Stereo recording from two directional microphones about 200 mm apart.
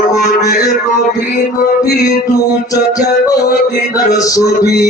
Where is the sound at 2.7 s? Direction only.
15° left (ahead or behind).